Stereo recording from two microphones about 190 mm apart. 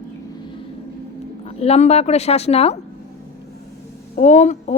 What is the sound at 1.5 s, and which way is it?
Speech, 35° left (ahead or behind).